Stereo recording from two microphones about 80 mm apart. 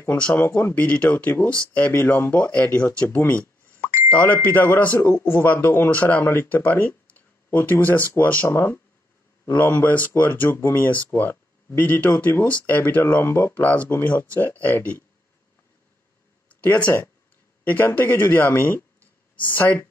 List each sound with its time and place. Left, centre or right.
0.2 s speech: left
3.2 s a sound: left
4.1 s speech: centre
16.4 s speech: centre